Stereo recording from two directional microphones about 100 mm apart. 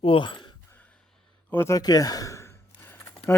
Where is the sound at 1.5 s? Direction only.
25° left (ahead or behind).